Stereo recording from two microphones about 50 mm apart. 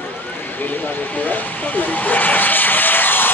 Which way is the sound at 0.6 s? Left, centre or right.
Left.